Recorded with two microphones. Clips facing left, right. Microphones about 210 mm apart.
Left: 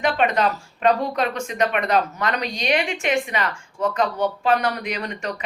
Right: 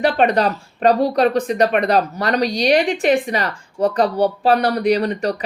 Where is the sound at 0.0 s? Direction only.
35° right (ahead or behind).